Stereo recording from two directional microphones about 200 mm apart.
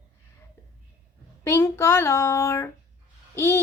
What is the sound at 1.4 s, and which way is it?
Speech, 15° left (ahead or behind).